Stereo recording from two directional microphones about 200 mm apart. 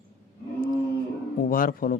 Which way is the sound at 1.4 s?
45° left (ahead or behind).